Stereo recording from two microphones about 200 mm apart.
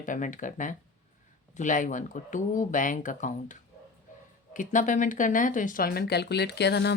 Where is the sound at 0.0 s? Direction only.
40° left (ahead or behind).